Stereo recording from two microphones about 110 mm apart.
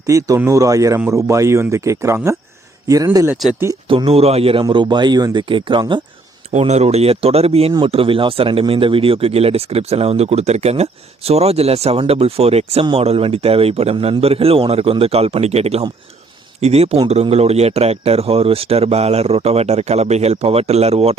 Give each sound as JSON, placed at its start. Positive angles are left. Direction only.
{"t": 0.1, "sound": "speech", "side_deg": -30}
{"t": 3.8, "sound": "speech", "side_deg": -55}
{"t": 4.6, "sound": "speech", "side_deg": -45}
{"t": 6.5, "sound": "speech", "side_deg": -90}
{"t": 7.9, "sound": "speech", "side_deg": -55}